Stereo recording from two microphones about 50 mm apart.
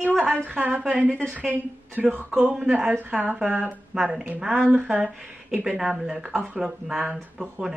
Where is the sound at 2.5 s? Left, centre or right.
Centre.